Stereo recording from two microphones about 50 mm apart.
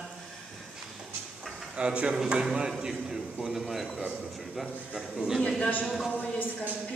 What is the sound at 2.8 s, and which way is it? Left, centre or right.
A man's voice, centre.